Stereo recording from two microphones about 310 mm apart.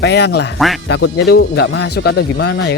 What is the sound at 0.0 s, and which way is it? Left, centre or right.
Speech, left.